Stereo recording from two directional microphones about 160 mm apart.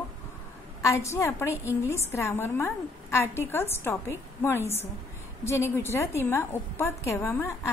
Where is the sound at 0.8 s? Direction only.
20° left (ahead or behind).